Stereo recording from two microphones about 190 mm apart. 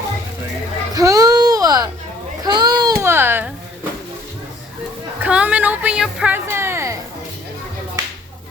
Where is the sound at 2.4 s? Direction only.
20° right (ahead or behind).